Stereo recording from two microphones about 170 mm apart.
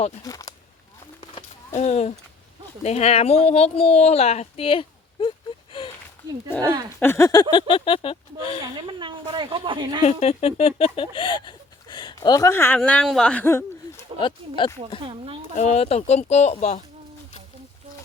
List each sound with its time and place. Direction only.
0.2 s a sound: 20° left (ahead or behind)
1.2 s a sound: 35° left (ahead or behind)
2.8 s speech: 40° left (ahead or behind)
6.5 s a sound: 10° left (ahead or behind)
7.5 s speech: 30° left (ahead or behind)
8.6 s a woman's voice: 30° right (ahead or behind)
10.0 s speech: 40° left (ahead or behind); by 14.0 s 15° left (ahead or behind)
14.2 s speech: 30° left (ahead or behind)
15.5 s speech: 40° left (ahead or behind)